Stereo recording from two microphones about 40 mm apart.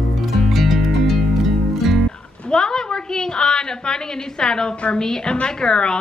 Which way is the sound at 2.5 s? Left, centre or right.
Centre.